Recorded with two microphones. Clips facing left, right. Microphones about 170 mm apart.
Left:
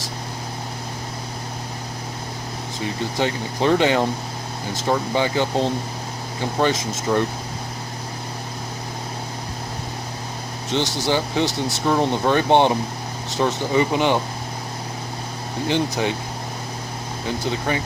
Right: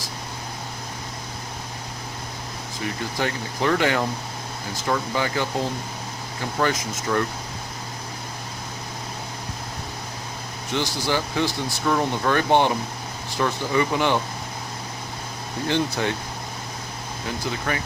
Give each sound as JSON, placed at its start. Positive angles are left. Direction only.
{"t": 2.8, "sound": "speech", "side_deg": 20}
{"t": 10.7, "sound": "speech", "side_deg": 25}
{"t": 15.6, "sound": "speech", "side_deg": 15}
{"t": 17.2, "sound": "speech", "side_deg": 25}